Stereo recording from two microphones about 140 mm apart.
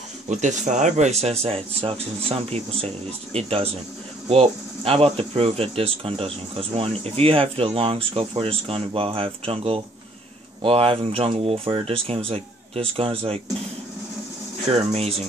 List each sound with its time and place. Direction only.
0.3 s speech: 60° right (ahead or behind); by 13.4 s 40° right (ahead or behind)
14.7 s speech: 50° right (ahead or behind)